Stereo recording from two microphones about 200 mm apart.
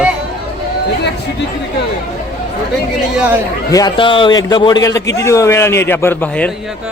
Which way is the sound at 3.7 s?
20° left (ahead or behind).